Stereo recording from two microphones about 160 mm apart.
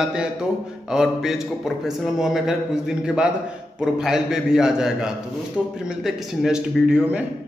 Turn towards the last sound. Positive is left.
turn(degrees=-5)  # may be behind; listen again after turning